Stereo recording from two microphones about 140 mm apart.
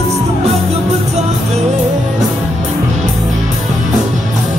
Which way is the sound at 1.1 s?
50° right (ahead or behind).